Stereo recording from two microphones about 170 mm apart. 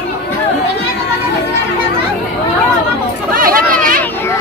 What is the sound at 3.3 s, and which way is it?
Chatter, 55° right (ahead or behind).